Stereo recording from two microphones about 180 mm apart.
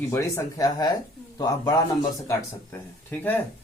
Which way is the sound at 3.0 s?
10° left (ahead or behind).